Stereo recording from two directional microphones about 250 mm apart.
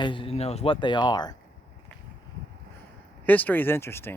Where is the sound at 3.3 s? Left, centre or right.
Centre.